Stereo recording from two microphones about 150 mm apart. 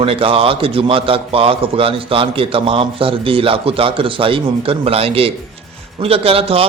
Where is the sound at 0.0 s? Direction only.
40° right (ahead or behind).